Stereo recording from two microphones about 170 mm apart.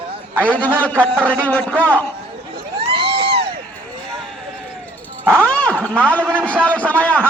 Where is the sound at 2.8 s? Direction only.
35° right (ahead or behind).